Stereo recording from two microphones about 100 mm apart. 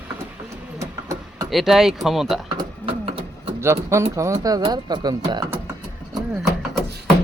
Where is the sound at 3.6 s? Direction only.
30° right (ahead or behind).